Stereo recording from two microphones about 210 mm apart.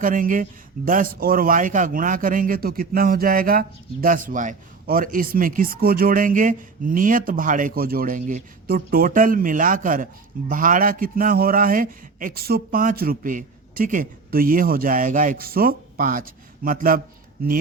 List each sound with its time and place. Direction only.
0.0 s a man's voice: 40° right (ahead or behind)